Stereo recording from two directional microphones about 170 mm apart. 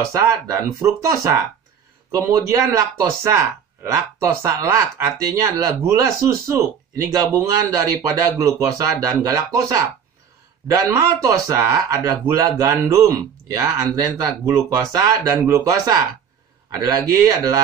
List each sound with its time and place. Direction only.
0.8 s speech: 15° right (ahead or behind)